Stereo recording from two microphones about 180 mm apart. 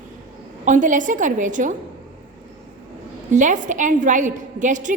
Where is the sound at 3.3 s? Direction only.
45° right (ahead or behind).